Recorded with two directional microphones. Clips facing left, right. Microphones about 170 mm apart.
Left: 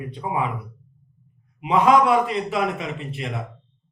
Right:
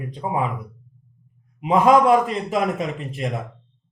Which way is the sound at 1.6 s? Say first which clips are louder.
Right 2 dB; 45° right (ahead or behind).